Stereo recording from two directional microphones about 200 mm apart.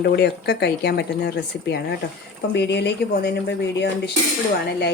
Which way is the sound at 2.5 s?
60° left (ahead or behind).